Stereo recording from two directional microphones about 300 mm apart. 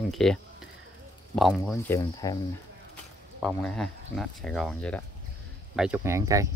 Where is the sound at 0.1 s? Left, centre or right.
Centre.